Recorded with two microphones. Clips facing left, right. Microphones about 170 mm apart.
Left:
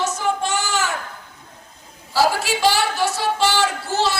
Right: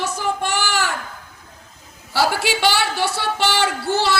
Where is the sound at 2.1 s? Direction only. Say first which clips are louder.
Left 1 dB; 65° right (ahead or behind).